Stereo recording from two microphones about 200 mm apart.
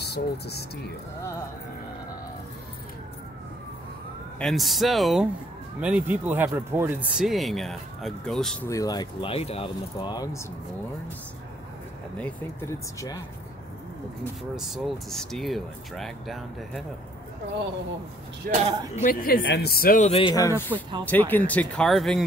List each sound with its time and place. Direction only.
0.0 s speech: 55° left (ahead or behind)
4.4 s speech: centre (ahead or behind)
8.6 s speech: 15° left (ahead or behind)
12.2 s speech: 10° left (ahead or behind)
14.5 s speech: centre (ahead or behind)
18.5 s a man's voice: 35° right (ahead or behind)
18.9 s a woman's voice: 45° left (ahead or behind)
19.4 s speech: 55° left (ahead or behind); by 22.2 s centre (ahead or behind)